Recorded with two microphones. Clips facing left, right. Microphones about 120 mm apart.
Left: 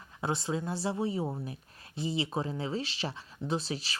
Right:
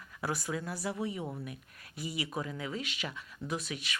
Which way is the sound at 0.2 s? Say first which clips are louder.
Left 3 dB; 25° left (ahead or behind).